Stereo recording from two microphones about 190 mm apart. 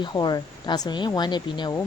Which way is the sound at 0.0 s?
20° left (ahead or behind).